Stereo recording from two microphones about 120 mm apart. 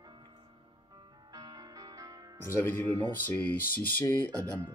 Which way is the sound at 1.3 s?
35° right (ahead or behind).